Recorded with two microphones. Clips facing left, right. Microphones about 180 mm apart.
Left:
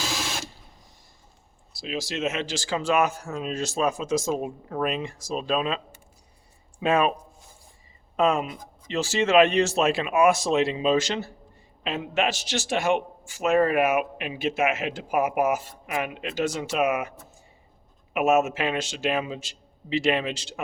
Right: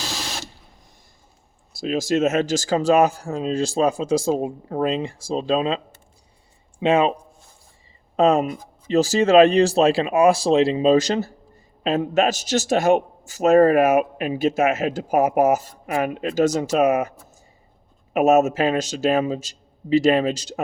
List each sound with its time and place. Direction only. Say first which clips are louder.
1.7 s a man's voice: right 10 dB; 45° right (ahead or behind); by 7.1 s 25° right (ahead or behind)
8.1 s a man's voice: right 6 dB; 35° right (ahead or behind)